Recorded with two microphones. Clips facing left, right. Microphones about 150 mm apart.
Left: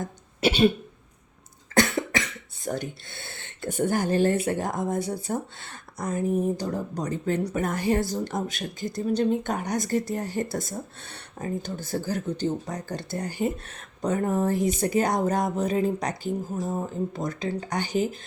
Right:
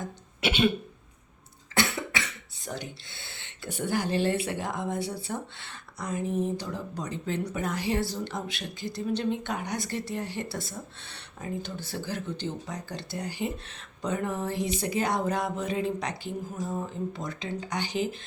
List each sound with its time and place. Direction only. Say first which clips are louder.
0.4 s speech: left 5 dB; 40° left (ahead or behind)
1.7 s cough: left 6 dB; 45° left (ahead or behind)
2.6 s speech: left 7 dB; 50° left (ahead or behind)